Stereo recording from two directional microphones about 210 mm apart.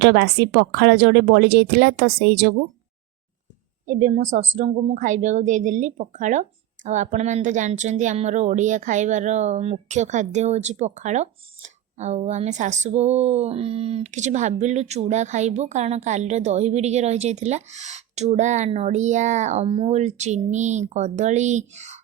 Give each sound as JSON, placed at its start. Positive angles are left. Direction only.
{"t": 0.0, "sound": "speech", "side_deg": -55}
{"t": 3.8, "sound": "a woman's voice", "side_deg": -35}